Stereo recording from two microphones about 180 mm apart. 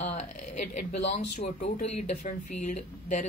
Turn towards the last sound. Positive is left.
turn(degrees=40)  # may be behind; listen again after turning